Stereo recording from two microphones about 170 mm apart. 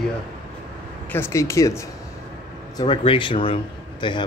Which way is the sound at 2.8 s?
30° left (ahead or behind).